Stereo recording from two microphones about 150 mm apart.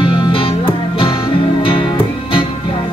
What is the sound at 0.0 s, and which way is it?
Music, 35° left (ahead or behind).